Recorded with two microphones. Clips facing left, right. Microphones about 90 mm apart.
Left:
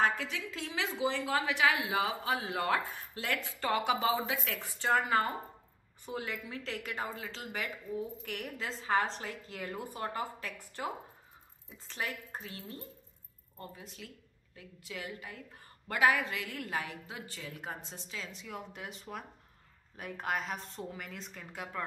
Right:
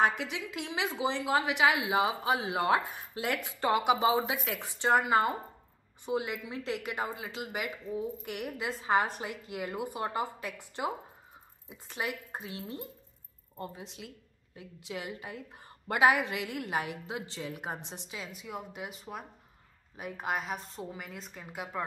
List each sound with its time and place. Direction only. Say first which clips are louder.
0.2 s a woman's voice: right 2 dB; 15° right (ahead or behind)